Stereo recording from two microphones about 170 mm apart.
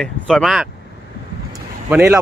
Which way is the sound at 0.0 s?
Centre (ahead or behind).